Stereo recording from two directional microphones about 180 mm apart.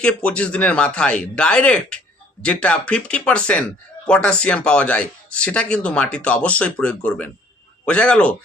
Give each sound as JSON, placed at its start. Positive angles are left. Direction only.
{"t": 0.0, "sound": "speech", "side_deg": 5}